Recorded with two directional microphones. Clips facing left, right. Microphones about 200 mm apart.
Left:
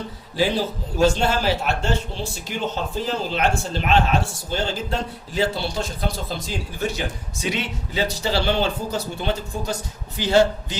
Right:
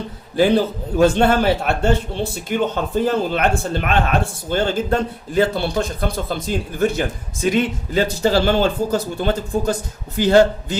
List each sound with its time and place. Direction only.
0.3 s a man's voice: 55° right (ahead or behind)